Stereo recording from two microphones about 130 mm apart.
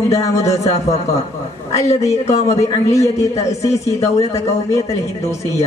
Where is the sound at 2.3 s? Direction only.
60° left (ahead or behind).